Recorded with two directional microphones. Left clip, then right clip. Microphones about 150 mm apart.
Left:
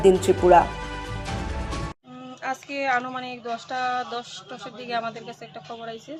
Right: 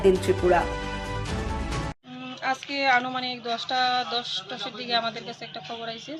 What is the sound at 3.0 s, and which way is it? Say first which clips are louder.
Speech: right 2 dB; 5° left (ahead or behind).